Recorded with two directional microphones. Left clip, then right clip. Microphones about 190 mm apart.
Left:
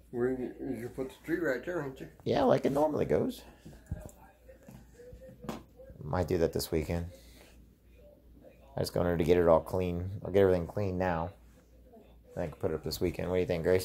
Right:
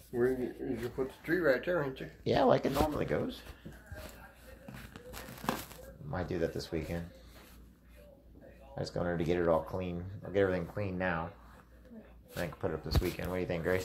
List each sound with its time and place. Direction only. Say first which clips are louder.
0.1 s speech: right 1 dB; 20° left (ahead or behind)
1.2 s speech: right 3 dB; 10° right (ahead or behind)
2.2 s speech: left 1 dB; 25° left (ahead or behind)
3.0 s speech: left 5 dB; 45° left (ahead or behind)
6.0 s speech: left 5 dB; 60° left (ahead or behind)
8.7 s speech: left 5 dB; 60° left (ahead or behind)
12.4 s speech: left 2 dB; 35° left (ahead or behind)
12.8 s speech: left 3 dB; 55° left (ahead or behind)